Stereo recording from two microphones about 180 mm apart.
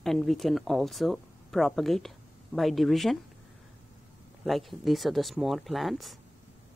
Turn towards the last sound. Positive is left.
turn(degrees=0)  # may be behind; listen again after turning